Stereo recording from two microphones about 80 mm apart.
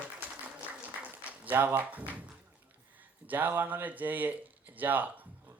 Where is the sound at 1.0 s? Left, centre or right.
Right.